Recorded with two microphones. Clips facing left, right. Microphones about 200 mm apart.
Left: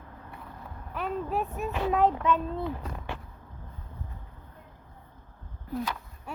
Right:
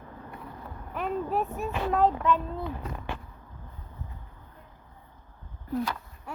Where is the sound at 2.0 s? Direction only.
20° left (ahead or behind).